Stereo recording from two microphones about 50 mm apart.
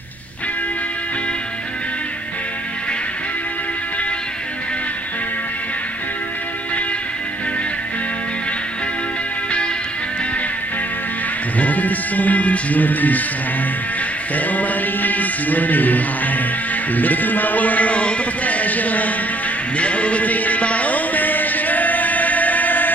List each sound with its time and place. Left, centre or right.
11.5 s music: left
14.3 s mantra: left
16.9 s a man's voice: left
19.8 s music: left